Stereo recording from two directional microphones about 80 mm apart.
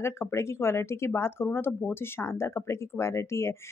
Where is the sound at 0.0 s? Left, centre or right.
Left.